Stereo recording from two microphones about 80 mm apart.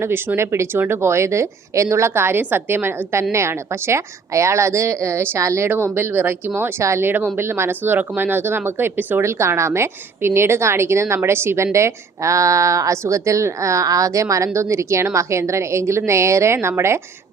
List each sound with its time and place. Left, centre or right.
0.0 s a woman's voice: right
9.2 s a woman's voice: right